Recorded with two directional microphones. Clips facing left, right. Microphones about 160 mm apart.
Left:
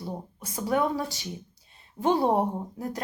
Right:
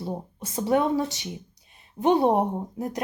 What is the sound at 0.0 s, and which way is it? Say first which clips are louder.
Speech: right 4 dB; 25° right (ahead or behind).